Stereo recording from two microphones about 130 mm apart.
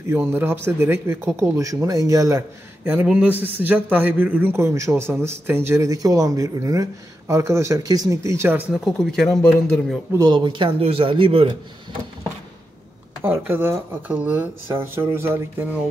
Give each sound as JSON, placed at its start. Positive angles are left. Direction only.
{"t": 0.1, "sound": "speech", "side_deg": -15}
{"t": 8.8, "sound": "a man's voice", "side_deg": 5}
{"t": 10.1, "sound": "speech", "side_deg": -35}
{"t": 13.2, "sound": "speech", "side_deg": -15}